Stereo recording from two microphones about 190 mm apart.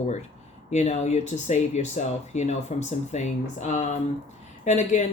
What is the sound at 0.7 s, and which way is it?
Speech, 40° left (ahead or behind).